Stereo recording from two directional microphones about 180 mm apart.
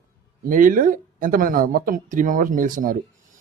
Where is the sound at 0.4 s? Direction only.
50° right (ahead or behind).